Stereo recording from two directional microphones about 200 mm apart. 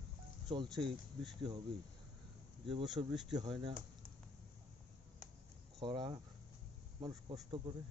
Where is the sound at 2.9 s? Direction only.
20° right (ahead or behind).